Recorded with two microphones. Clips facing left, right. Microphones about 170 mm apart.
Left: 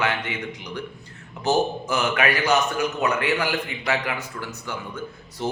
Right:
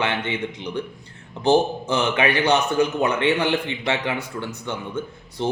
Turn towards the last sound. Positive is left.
turn(degrees=-30)  # may be behind; listen again after turning